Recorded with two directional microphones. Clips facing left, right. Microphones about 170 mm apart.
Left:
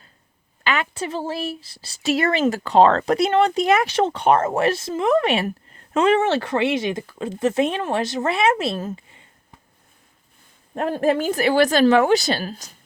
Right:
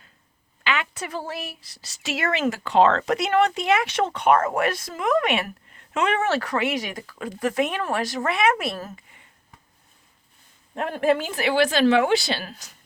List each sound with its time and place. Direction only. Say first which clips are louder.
0.6 s a sound: left 3 dB; 40° left (ahead or behind)
1.0 s speech: left 5 dB; 25° left (ahead or behind)
10.8 s speech: left 2 dB; 35° left (ahead or behind)